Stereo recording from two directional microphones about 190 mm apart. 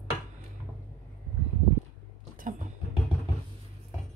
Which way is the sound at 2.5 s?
45° right (ahead or behind).